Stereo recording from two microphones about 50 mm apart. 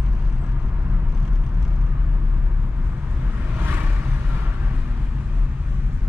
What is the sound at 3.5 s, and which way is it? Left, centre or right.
Vehicle, right.